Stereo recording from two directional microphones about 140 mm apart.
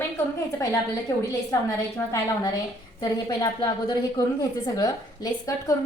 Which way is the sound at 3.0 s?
30° left (ahead or behind).